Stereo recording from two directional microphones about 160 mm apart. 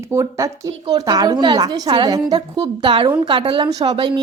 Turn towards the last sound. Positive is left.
turn(degrees=-30)  # may be behind; listen again after turning